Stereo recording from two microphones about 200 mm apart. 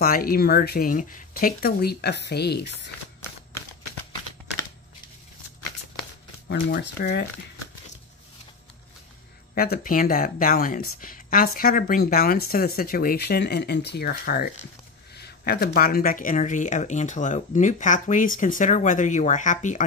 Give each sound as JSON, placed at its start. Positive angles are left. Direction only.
{"t": 0.0, "sound": "speech", "side_deg": 45}
{"t": 6.5, "sound": "speech", "side_deg": 55}
{"t": 9.6, "sound": "speech", "side_deg": 45}